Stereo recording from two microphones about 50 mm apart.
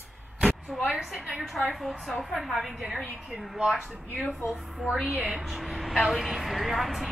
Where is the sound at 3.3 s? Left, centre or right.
Centre.